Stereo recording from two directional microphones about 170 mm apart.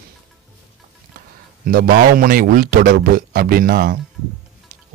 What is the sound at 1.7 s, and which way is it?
A man's voice, 60° right (ahead or behind).